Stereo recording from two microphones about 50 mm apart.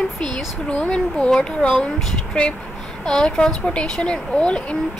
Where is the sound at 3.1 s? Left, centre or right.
Centre.